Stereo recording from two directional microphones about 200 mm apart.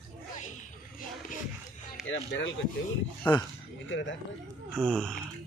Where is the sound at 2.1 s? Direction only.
65° left (ahead or behind).